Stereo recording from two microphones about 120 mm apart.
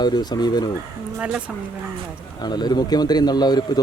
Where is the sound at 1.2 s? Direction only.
10° right (ahead or behind).